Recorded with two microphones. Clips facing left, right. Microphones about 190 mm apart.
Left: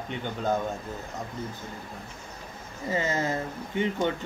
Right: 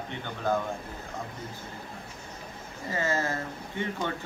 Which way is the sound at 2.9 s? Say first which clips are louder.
Left 2 dB; 20° left (ahead or behind).